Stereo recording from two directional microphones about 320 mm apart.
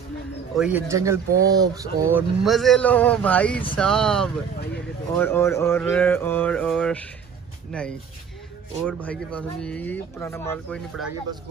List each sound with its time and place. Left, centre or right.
0.6 s speech: centre